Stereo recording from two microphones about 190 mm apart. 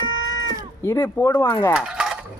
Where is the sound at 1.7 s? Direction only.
5° right (ahead or behind).